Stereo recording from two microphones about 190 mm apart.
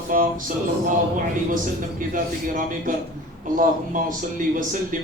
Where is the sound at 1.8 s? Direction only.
45° right (ahead or behind).